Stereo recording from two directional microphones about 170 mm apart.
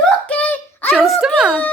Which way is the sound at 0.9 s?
Centre (ahead or behind).